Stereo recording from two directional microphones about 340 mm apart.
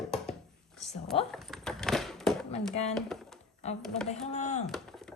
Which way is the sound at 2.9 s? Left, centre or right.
Centre.